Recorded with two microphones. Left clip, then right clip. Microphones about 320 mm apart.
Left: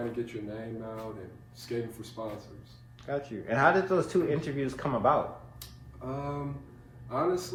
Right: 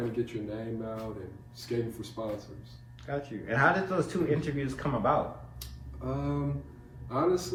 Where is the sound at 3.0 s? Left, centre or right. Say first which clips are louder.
Left 1 dB; centre.